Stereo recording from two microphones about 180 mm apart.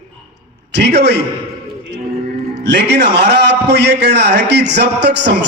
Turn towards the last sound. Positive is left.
turn(degrees=-70)  # may be behind; listen again after turning